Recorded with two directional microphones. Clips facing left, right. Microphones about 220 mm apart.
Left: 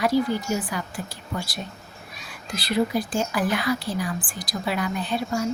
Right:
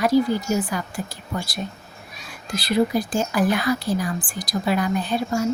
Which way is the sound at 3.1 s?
45° right (ahead or behind).